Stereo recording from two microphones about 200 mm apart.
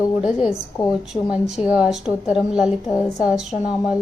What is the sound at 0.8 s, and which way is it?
Speech, 20° left (ahead or behind).